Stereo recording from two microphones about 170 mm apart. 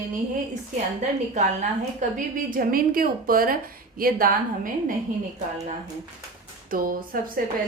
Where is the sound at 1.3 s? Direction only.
45° right (ahead or behind).